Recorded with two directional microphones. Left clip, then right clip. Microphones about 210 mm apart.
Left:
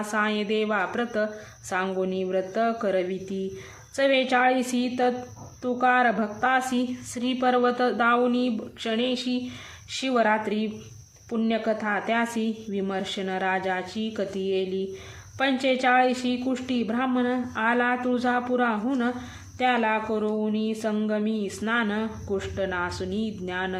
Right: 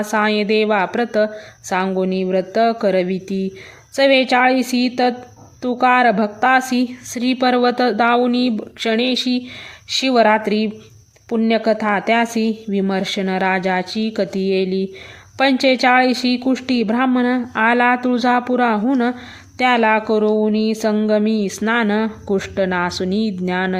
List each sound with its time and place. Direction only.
0.1 s speech: 35° right (ahead or behind)